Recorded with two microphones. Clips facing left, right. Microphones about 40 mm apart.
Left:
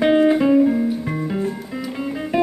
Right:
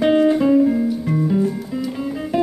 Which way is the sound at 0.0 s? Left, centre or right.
Centre.